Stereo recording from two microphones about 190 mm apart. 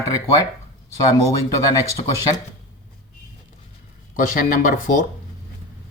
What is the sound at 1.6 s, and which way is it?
Speech, 15° left (ahead or behind).